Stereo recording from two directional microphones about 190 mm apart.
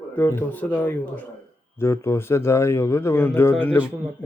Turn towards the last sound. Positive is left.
turn(degrees=10)  # may be behind; listen again after turning